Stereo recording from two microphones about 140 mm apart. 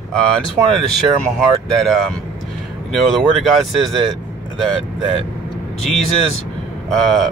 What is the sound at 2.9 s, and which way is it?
Speech, centre (ahead or behind).